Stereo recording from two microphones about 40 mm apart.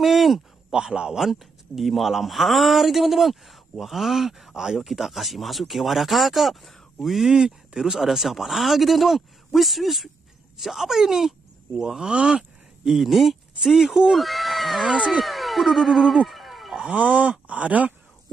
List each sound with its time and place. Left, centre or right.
0.0 s a sound: centre
0.7 s speech: right
1.2 s speech: centre
7.3 s speech: centre
8.0 s speech: centre
16.9 s speech: right